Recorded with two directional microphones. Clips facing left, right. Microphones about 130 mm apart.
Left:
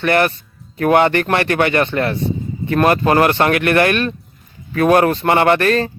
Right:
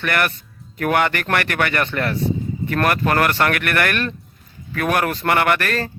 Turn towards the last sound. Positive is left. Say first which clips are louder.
# left 6 dB
turn(degrees=20)  # may be behind; listen again after turning